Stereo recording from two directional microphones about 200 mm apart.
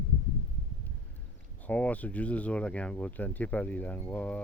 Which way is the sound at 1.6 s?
5° left (ahead or behind).